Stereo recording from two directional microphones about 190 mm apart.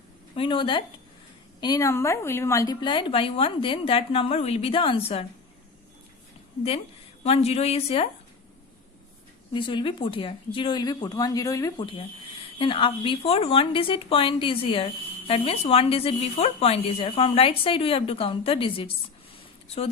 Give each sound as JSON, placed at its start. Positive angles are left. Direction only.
{"t": 0.3, "sound": "speech", "side_deg": 25}
{"t": 7.3, "sound": "a woman's voice", "side_deg": 35}
{"t": 9.5, "sound": "speech", "side_deg": 25}